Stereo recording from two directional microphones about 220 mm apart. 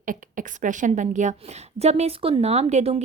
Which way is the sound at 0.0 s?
35° right (ahead or behind).